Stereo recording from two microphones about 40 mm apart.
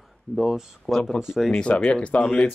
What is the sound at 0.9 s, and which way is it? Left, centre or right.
Speech, centre.